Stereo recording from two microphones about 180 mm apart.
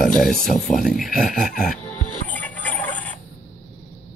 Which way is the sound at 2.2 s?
10° left (ahead or behind).